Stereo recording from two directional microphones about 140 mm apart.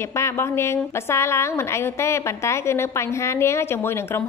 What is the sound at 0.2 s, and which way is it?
A woman's voice, 20° left (ahead or behind).